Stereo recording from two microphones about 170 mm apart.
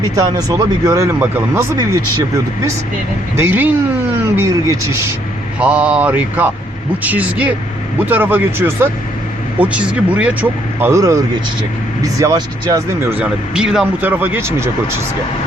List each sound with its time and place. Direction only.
0.3 s speech: 20° right (ahead or behind)
3.3 s a man's voice: 15° right (ahead or behind)
13.1 s a man's voice: 5° right (ahead or behind)